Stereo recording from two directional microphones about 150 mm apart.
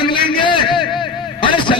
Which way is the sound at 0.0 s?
30° left (ahead or behind).